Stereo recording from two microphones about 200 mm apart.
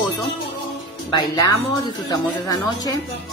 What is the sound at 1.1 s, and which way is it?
Speech, 20° left (ahead or behind).